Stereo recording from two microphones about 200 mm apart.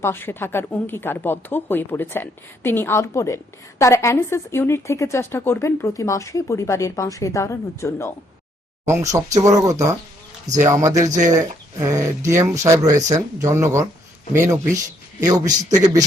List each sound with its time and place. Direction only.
0.0 s speech: 10° left (ahead or behind)
8.9 s speech: 15° right (ahead or behind)